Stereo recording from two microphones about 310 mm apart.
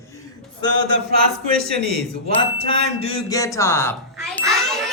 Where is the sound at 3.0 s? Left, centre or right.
Centre.